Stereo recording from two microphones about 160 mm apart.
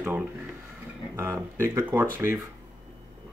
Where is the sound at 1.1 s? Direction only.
15° right (ahead or behind).